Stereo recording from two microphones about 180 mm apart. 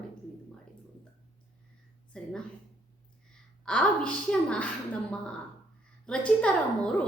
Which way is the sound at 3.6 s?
5° left (ahead or behind).